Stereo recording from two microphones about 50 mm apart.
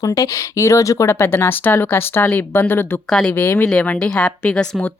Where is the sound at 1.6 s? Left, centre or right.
Left.